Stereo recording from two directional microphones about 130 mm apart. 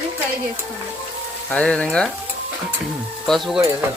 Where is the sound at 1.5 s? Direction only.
10° left (ahead or behind).